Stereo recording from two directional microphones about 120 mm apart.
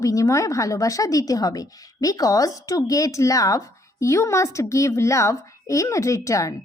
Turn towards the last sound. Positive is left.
turn(degrees=25)  # may be behind; listen again after turning